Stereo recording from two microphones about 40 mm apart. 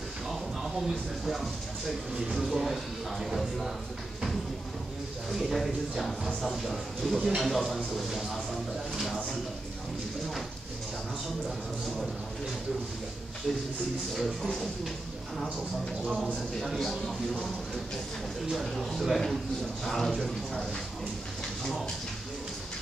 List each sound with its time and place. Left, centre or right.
0.6 s speech: centre
5.3 s speech: centre
14.1 s speech: centre
16.6 s speech: centre
18.5 s speech: centre
20.0 s speech: centre